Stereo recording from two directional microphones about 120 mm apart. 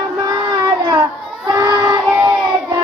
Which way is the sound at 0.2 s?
30° right (ahead or behind).